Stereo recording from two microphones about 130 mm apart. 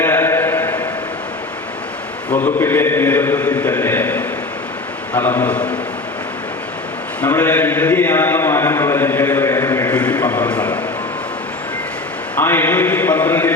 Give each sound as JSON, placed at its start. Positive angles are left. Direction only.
{"t": 0.0, "sound": "a sound", "side_deg": 15}
{"t": 2.3, "sound": "a man's voice", "side_deg": 15}
{"t": 7.2, "sound": "a man's voice", "side_deg": 15}
{"t": 12.4, "sound": "a man's voice", "side_deg": 15}